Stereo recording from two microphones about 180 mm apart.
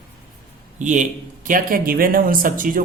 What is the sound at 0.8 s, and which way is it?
A man's voice, 45° right (ahead or behind).